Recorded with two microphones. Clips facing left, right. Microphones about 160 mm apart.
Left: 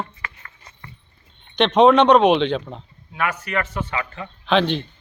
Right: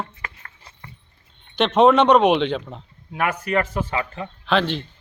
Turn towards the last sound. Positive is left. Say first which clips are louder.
# left 2 dB
turn(degrees=-5)  # may be behind; listen again after turning